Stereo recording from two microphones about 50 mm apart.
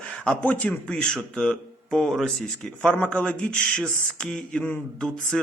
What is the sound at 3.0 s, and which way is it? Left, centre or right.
A man's voice, left.